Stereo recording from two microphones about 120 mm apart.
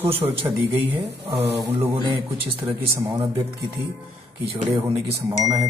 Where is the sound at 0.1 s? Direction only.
50° right (ahead or behind).